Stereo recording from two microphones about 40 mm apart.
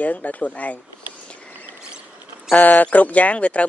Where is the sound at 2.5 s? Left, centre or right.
Left.